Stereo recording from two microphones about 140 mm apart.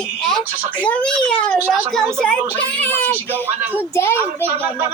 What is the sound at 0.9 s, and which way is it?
Speech, 10° left (ahead or behind).